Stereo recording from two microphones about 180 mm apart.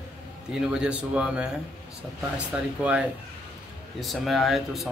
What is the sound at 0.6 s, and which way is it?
A man's voice, 5° right (ahead or behind).